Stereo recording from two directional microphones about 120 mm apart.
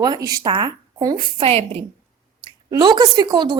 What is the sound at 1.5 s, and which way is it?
Speech, 60° right (ahead or behind).